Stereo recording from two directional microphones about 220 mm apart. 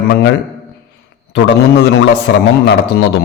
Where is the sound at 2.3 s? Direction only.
55° left (ahead or behind).